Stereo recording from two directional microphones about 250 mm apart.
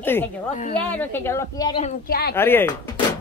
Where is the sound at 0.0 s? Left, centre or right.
Centre.